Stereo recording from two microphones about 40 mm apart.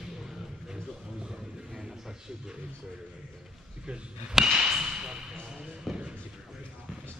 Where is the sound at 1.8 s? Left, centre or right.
Centre.